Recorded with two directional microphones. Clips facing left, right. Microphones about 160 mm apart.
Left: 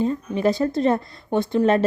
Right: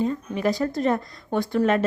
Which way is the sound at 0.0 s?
30° left (ahead or behind).